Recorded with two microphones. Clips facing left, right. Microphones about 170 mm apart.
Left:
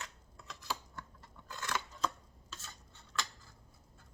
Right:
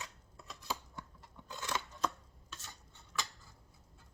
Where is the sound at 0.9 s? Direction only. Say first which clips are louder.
Even; 15° right (ahead or behind).